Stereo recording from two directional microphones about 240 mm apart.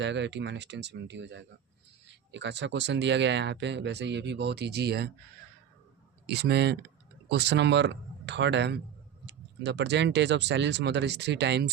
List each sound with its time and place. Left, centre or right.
0.0 s speech: right
6.2 s speech: right